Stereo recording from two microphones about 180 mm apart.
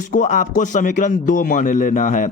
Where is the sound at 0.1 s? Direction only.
45° left (ahead or behind).